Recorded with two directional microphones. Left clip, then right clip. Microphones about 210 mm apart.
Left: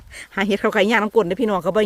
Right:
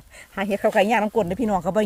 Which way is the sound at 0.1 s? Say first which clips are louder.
Left 4 dB; 35° left (ahead or behind).